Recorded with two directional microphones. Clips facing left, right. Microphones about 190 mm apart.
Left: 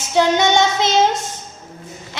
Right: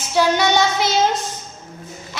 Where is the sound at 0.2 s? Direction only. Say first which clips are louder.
Left 2 dB; 25° left (ahead or behind).